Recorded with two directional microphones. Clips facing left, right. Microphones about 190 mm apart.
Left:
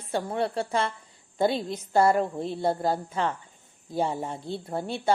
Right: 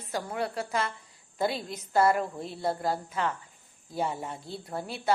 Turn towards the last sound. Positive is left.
turn(degrees=25)  # may be behind; listen again after turning